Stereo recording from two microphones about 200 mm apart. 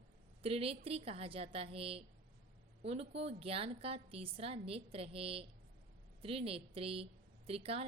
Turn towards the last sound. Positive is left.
turn(degrees=-30)  # may be behind; listen again after turning